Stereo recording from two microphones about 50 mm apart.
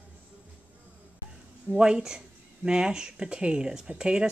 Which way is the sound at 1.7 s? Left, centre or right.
Centre.